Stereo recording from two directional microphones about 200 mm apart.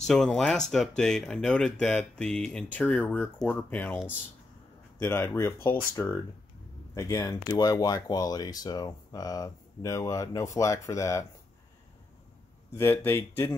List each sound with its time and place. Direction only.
0.0 s speech: centre (ahead or behind)
12.7 s speech: 10° left (ahead or behind)